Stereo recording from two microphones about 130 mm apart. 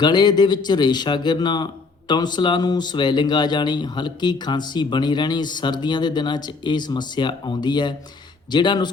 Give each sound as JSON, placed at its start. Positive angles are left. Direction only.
{"t": 0.0, "sound": "speech", "side_deg": 35}